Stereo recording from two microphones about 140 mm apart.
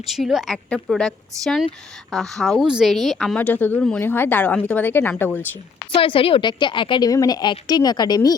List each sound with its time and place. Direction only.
0.1 s a woman's voice: centre (ahead or behind); by 5.5 s 15° left (ahead or behind)
5.9 s a woman's voice: 40° left (ahead or behind)